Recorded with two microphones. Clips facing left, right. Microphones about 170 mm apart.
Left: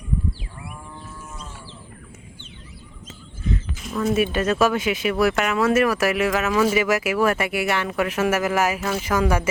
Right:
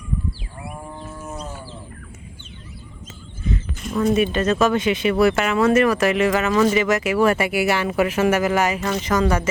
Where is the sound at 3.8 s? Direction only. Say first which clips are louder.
Right 3 dB; centre (ahead or behind).